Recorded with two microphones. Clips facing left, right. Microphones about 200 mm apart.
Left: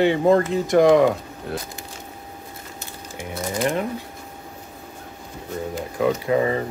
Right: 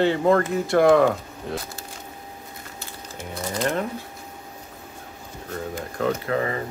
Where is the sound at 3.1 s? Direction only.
10° left (ahead or behind).